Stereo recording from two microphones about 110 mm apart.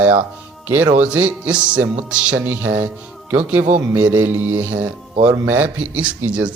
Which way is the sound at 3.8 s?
20° right (ahead or behind).